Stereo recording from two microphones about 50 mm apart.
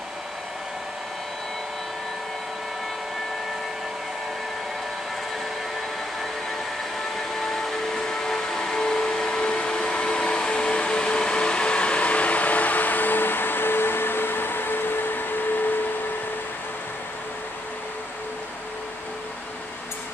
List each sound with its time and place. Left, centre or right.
7.2 s train: centre; by 15.8 s left